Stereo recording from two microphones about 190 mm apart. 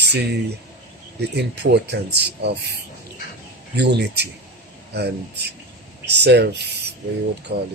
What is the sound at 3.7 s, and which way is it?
A man's voice, 65° right (ahead or behind).